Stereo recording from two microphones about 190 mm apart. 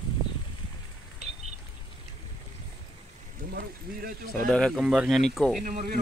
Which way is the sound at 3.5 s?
50° right (ahead or behind).